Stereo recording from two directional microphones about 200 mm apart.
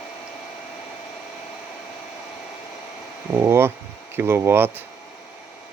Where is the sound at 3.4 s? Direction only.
10° right (ahead or behind).